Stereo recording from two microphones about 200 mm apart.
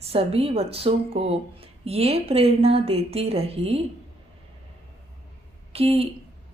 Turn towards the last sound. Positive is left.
turn(degrees=-30)  # may be behind; listen again after turning